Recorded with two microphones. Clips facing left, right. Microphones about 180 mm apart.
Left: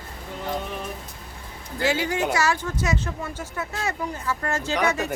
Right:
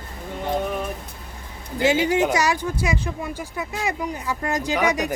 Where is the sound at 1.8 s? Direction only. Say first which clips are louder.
Right 5 dB; 20° right (ahead or behind).